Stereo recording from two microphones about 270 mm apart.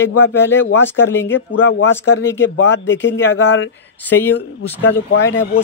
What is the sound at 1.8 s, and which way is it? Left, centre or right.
Speech, left.